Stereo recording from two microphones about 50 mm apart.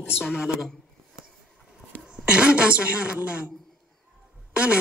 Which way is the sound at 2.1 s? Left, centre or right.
Right.